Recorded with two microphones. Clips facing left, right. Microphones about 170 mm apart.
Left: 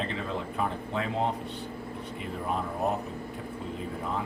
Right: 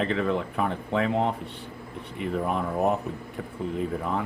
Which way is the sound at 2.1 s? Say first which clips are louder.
Right 6 dB; 65° right (ahead or behind).